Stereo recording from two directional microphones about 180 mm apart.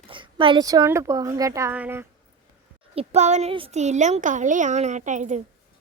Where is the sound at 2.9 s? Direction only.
40° right (ahead or behind).